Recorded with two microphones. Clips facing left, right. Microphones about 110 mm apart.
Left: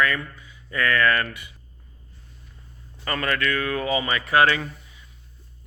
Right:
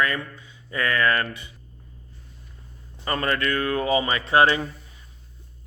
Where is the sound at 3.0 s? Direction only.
25° right (ahead or behind).